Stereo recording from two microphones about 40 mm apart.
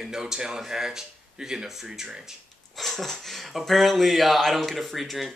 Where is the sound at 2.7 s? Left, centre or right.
Centre.